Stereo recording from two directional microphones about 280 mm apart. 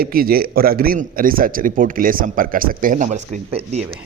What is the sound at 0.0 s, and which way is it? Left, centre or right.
A man's voice, right.